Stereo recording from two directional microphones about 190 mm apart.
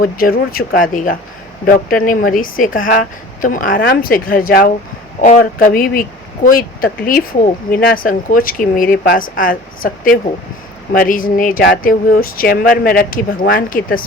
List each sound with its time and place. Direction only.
0.0 s speech: 50° left (ahead or behind)